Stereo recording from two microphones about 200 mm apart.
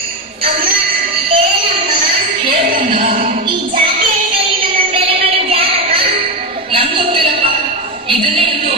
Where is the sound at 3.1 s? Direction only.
45° right (ahead or behind).